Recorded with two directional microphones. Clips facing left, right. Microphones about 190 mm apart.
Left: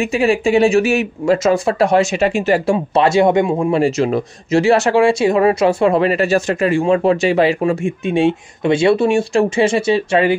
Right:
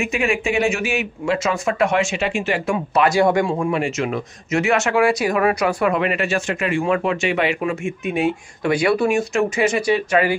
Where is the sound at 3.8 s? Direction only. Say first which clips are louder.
Left 7 dB; 35° left (ahead or behind).